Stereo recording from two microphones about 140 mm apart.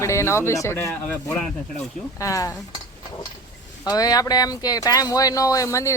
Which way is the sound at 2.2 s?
25° left (ahead or behind).